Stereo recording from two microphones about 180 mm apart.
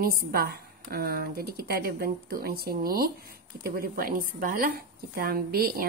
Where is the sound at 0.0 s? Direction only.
60° right (ahead or behind).